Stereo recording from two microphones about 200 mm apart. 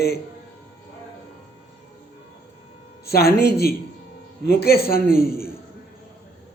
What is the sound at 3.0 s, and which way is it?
A man's voice, 50° left (ahead or behind).